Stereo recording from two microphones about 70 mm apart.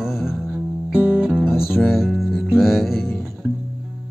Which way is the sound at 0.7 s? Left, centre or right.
Right.